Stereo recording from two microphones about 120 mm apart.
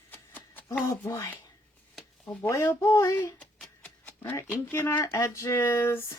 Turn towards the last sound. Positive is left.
turn(degrees=20)  # may be behind; listen again after turning